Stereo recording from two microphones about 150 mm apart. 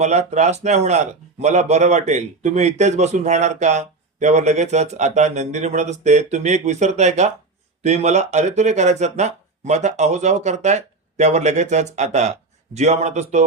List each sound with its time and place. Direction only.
0.0 s speech: 50° right (ahead or behind)